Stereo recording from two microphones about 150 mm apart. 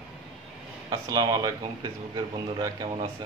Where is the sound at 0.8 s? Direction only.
25° right (ahead or behind).